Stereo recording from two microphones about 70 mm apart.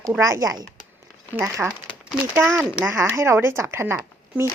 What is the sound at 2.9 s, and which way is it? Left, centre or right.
Speech, right.